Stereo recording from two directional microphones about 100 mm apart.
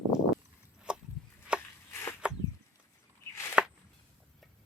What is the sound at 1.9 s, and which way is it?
Walk, 30° left (ahead or behind).